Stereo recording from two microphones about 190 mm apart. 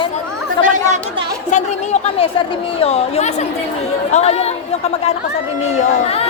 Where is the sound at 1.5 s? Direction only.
35° left (ahead or behind).